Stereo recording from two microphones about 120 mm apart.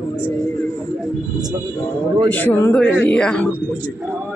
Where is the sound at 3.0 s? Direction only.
10° left (ahead or behind).